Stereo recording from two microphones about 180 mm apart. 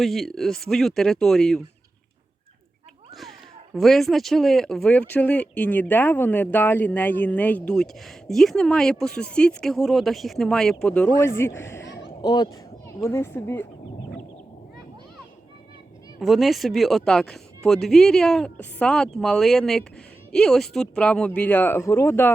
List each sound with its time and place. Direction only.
0.0 s speech: centre (ahead or behind)
3.8 s speech: centre (ahead or behind)
16.2 s speech: centre (ahead or behind)